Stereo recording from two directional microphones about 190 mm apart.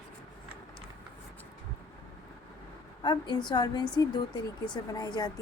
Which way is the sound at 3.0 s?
25° left (ahead or behind).